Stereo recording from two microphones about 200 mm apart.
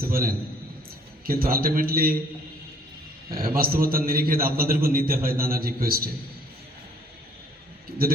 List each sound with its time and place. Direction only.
0.0 s a man's voice: 45° right (ahead or behind)
3.3 s a man's voice: 45° right (ahead or behind)